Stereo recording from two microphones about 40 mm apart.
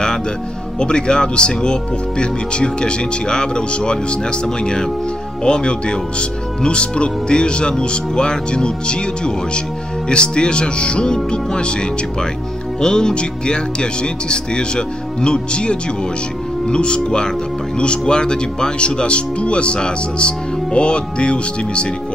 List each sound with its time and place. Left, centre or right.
0.7 s speech: left
12.8 s speech: centre